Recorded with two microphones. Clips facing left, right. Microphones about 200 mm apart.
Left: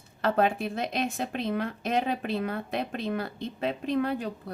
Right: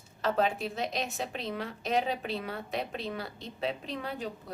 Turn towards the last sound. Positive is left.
turn(degrees=55)  # may be behind; listen again after turning